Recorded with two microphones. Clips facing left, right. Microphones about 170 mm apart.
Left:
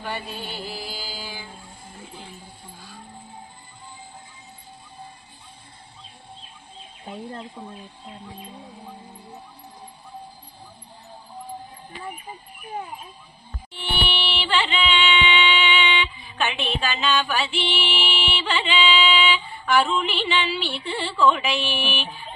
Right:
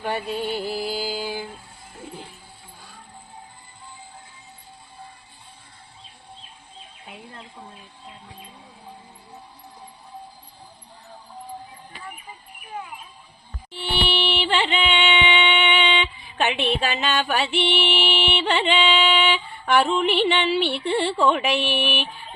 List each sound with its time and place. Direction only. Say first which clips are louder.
0.0 s music: right 6 dB; 50° right (ahead or behind)
7.1 s speech: left 8 dB; 35° left (ahead or behind)
14.3 s music: right 2 dB; 50° right (ahead or behind)